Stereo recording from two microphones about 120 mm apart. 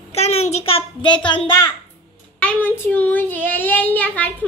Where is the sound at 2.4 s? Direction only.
15° left (ahead or behind).